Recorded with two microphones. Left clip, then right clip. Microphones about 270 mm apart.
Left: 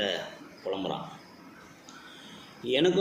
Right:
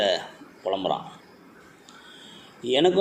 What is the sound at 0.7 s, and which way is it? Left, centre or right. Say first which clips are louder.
Speech: right 7 dB; right.